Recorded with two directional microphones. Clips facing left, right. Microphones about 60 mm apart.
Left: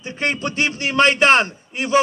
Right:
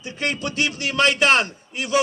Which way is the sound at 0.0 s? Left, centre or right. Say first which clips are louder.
Left 3 dB; left.